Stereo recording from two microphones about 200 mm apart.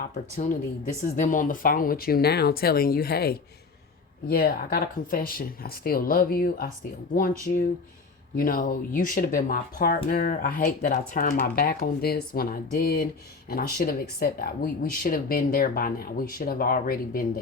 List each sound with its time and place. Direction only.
1.1 s speech: 40° left (ahead or behind)
8.4 s speech: 45° left (ahead or behind)